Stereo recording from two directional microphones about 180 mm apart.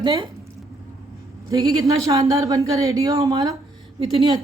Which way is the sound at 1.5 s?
20° right (ahead or behind).